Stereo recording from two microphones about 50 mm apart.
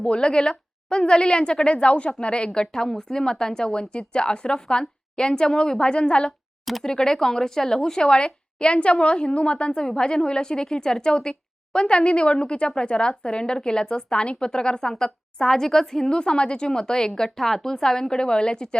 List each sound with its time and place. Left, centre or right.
0.0 s a woman's voice: centre